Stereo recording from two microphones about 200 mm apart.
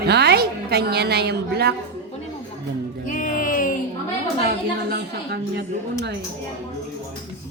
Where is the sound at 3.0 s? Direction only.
40° left (ahead or behind).